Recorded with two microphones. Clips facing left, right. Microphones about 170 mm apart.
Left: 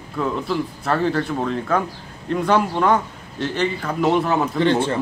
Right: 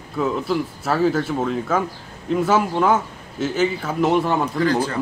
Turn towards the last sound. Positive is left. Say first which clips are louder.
# left 2 dB
turn(degrees=25)  # may be behind; listen again after turning